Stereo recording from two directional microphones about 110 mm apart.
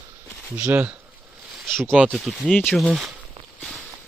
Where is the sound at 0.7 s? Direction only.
15° right (ahead or behind).